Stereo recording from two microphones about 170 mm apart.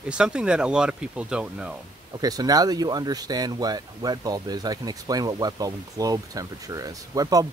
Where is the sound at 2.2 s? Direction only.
20° right (ahead or behind).